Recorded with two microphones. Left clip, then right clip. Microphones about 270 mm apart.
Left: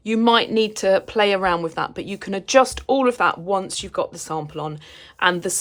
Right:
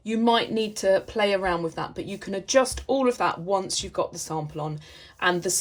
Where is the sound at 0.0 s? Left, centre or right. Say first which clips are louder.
Left 5 dB; centre.